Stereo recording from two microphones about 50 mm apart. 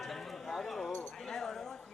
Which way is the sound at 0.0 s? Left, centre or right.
Centre.